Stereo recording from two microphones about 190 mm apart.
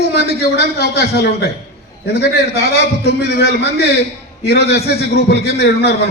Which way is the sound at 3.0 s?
60° left (ahead or behind).